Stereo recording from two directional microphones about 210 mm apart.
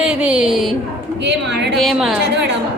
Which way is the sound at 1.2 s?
55° right (ahead or behind).